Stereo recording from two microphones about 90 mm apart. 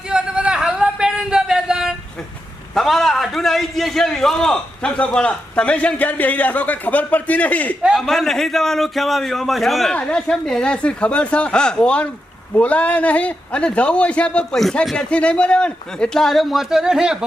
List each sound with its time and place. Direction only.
0.1 s a sound: 10° right (ahead or behind)
2.7 s a man's voice: centre (ahead or behind)
7.9 s a man's voice: 5° left (ahead or behind)